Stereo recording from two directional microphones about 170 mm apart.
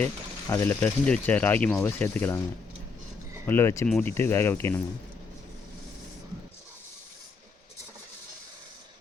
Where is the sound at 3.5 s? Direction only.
15° left (ahead or behind).